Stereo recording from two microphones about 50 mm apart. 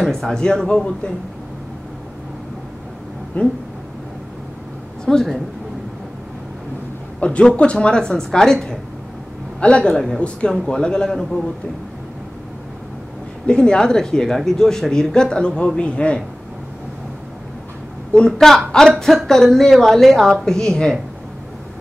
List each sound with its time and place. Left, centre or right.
0.0 s speech: centre
3.4 s speech: left
5.0 s speech: centre
7.2 s speech: left
13.5 s speech: centre
18.1 s speech: centre